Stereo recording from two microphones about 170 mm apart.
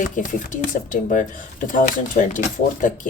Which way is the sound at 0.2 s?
50° left (ahead or behind).